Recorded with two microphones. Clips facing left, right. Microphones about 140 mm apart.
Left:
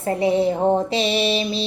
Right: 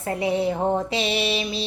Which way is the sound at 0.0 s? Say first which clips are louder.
Left 4 dB; 25° left (ahead or behind).